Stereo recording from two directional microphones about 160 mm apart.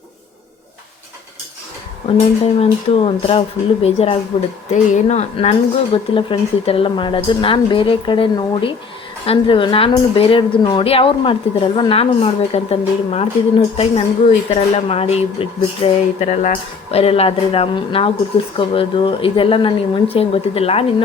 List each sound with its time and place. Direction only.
2.0 s a woman's voice: 40° left (ahead or behind)